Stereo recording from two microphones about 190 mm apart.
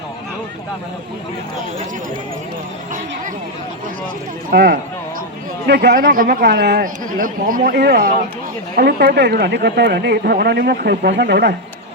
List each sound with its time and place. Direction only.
4.5 s speech: 55° right (ahead or behind)